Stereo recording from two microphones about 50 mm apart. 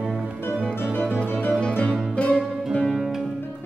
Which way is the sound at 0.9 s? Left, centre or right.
Left.